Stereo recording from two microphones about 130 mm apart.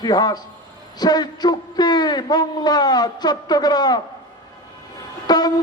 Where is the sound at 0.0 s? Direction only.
30° left (ahead or behind).